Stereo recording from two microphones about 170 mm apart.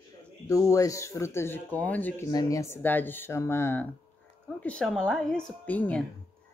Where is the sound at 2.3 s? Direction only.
20° left (ahead or behind).